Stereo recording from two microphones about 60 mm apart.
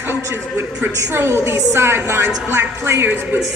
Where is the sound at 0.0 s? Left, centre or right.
Right.